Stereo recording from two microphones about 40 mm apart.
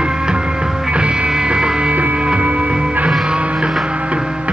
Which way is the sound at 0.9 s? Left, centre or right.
Right.